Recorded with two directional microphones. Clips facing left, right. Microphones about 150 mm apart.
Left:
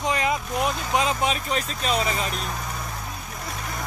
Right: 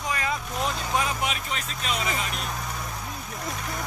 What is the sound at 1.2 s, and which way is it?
Speech, 35° left (ahead or behind).